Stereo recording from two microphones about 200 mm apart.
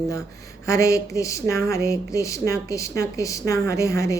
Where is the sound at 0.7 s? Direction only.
15° left (ahead or behind).